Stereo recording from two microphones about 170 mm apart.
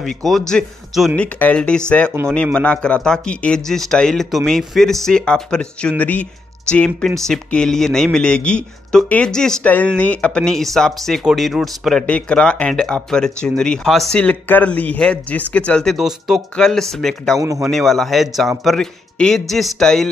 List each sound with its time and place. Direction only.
0.0 s speech: centre (ahead or behind)
17.4 s a man's voice: 20° right (ahead or behind)
17.6 s speech: centre (ahead or behind)